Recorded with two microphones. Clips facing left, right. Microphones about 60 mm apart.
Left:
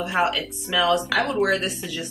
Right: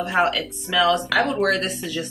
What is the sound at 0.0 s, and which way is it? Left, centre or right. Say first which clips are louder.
Speech: right 2 dB; centre.